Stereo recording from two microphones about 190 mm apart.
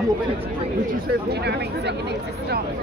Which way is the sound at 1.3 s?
60° right (ahead or behind).